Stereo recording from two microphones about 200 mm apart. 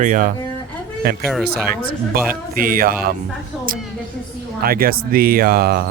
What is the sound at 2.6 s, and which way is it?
Speech, 45° right (ahead or behind).